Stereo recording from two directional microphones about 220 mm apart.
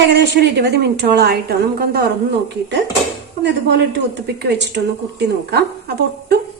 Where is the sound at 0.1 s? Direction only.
50° right (ahead or behind).